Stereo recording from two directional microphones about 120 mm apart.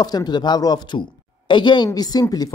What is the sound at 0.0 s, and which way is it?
Speech, 35° left (ahead or behind).